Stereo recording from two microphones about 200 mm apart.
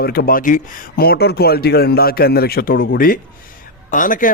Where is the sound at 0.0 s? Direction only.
50° left (ahead or behind).